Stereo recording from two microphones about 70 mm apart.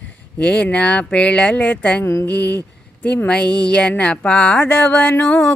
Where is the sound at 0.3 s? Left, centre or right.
Centre.